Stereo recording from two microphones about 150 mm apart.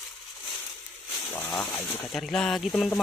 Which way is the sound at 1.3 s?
15° left (ahead or behind).